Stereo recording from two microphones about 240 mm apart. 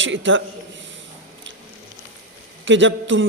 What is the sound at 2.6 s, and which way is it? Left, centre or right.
Speech, right.